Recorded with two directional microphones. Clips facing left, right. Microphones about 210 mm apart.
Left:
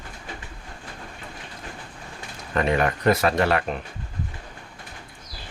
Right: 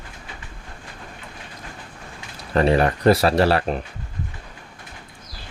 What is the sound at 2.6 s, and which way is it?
Speech, 35° right (ahead or behind).